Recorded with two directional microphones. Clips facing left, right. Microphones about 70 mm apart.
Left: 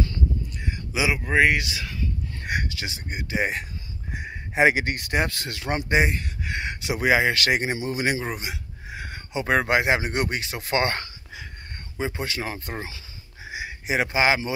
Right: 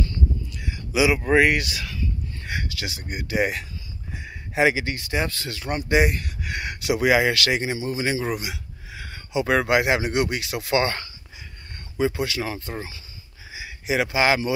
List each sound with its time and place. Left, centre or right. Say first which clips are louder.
0.9 s speech: right 4 dB; left
2.0 s a sound: even; left
2.6 s speech: right 1 dB; left
4.3 s a sound: left 1 dB; left
4.7 s speech: left 1 dB; left
5.9 s speech: right 3 dB; left
8.4 s a sound: right 1 dB; left
9.7 s speech: right 1 dB; left
12.0 s a man's voice: right 5 dB; left